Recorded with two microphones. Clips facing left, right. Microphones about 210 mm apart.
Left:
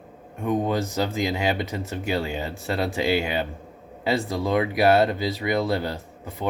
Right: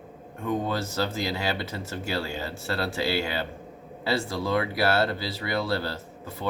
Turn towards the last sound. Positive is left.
turn(degrees=20)  # may be behind; listen again after turning